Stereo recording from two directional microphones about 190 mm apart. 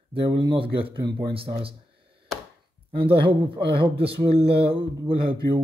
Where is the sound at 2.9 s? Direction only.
30° right (ahead or behind).